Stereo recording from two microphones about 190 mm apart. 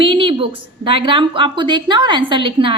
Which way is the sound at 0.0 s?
25° right (ahead or behind).